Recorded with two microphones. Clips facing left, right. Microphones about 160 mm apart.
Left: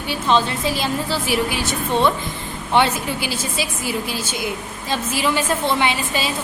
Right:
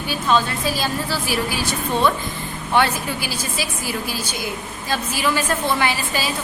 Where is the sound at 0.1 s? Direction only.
25° left (ahead or behind).